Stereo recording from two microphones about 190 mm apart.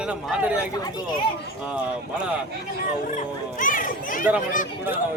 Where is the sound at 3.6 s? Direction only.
45° left (ahead or behind).